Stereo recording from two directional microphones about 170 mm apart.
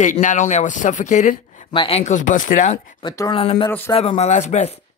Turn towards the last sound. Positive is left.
turn(degrees=45)  # may be behind; listen again after turning